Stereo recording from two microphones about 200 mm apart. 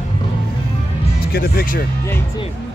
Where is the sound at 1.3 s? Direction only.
50° left (ahead or behind).